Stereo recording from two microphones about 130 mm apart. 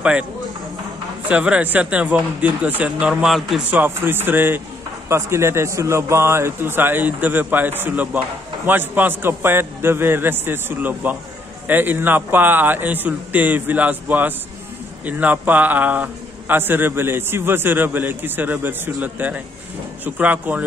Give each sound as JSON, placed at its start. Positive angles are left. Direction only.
{"t": 1.3, "sound": "a man's voice", "side_deg": -10}
{"t": 3.7, "sound": "a man's voice", "side_deg": -15}